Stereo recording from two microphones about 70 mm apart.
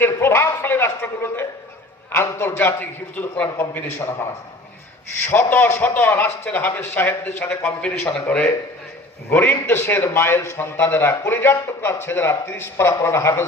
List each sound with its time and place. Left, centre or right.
0.0 s a man's voice: left
5.3 s a man's voice: left
7.4 s a man's voice: centre
9.3 s a man's voice: left